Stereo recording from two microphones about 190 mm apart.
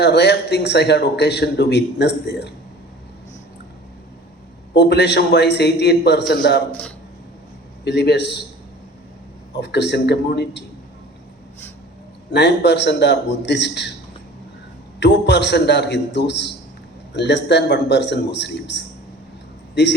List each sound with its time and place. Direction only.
0.0 s a man's voice: 65° left (ahead or behind)
4.7 s a man's voice: 65° left (ahead or behind)
7.9 s a man's voice: 65° left (ahead or behind)
9.6 s a man's voice: 65° left (ahead or behind)
12.3 s a man's voice: 65° left (ahead or behind)
14.9 s a man's voice: 60° left (ahead or behind)